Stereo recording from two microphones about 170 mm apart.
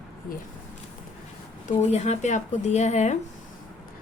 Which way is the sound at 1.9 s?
45° left (ahead or behind).